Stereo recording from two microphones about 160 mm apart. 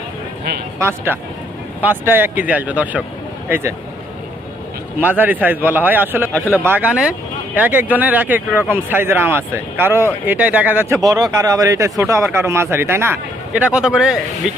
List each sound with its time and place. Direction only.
0.8 s speech: 15° right (ahead or behind)
4.9 s speech: 10° right (ahead or behind)